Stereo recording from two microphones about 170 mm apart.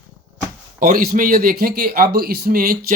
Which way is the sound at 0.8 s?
55° right (ahead or behind).